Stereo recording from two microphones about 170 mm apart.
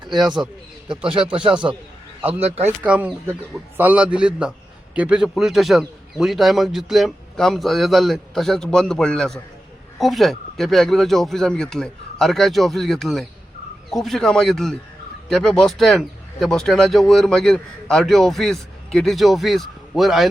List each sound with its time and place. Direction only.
0.1 s a man's voice: centre (ahead or behind)
1.3 s speech: 30° right (ahead or behind)
2.2 s a man's voice: 10° right (ahead or behind)